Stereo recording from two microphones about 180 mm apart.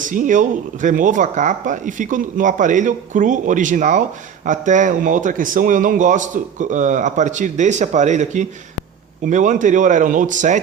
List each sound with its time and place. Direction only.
0.0 s speech: 45° right (ahead or behind)